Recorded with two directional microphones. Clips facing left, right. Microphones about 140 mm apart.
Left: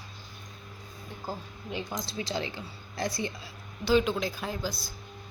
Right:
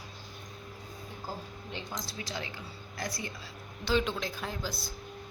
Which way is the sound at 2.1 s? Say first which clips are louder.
Left 6 dB; 25° left (ahead or behind).